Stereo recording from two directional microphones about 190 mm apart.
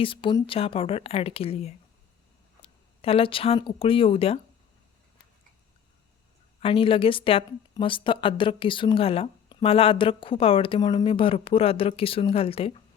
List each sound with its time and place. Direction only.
0.0 s speech: 25° left (ahead or behind)
6.6 s speech: 30° left (ahead or behind)